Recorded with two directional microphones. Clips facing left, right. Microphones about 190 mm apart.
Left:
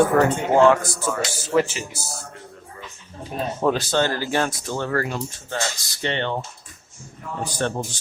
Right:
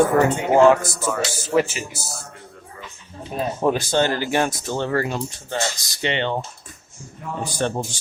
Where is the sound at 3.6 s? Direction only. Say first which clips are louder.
Right 1 dB; 15° right (ahead or behind).